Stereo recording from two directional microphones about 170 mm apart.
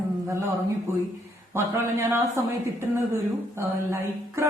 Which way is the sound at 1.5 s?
15° right (ahead or behind).